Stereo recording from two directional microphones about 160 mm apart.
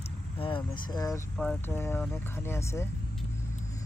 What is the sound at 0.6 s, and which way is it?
Speech, 25° left (ahead or behind).